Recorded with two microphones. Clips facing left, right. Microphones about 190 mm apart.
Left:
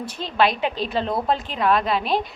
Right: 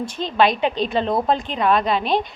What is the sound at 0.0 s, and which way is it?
A woman's voice, 5° left (ahead or behind).